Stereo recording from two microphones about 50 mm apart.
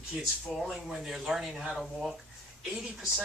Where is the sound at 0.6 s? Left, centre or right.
Centre.